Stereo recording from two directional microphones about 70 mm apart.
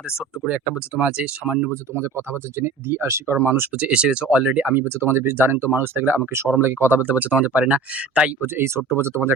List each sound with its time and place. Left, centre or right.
0.4 s speech: centre
2.0 s speech: right
3.8 s speech: centre
8.4 s speech: right